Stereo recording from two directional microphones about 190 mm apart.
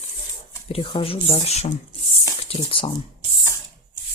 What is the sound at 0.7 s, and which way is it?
Speech, 30° left (ahead or behind).